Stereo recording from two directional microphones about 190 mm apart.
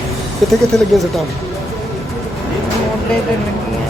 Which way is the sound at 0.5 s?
Centre (ahead or behind).